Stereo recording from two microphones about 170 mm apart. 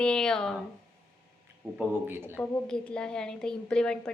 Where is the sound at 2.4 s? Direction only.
5° left (ahead or behind).